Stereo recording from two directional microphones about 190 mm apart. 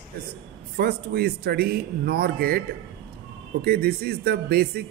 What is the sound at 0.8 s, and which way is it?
A man's voice, 55° right (ahead or behind).